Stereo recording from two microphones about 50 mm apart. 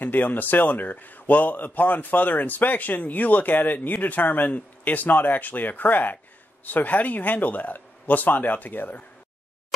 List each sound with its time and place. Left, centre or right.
0.0 s a man's voice: left